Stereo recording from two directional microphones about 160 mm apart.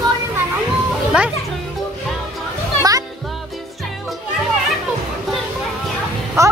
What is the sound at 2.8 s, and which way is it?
Music, 20° right (ahead or behind).